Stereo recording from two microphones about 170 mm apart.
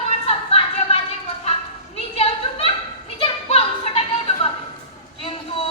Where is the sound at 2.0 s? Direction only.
35° left (ahead or behind).